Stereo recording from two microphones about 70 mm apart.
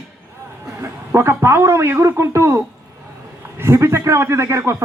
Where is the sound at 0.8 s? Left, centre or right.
Right.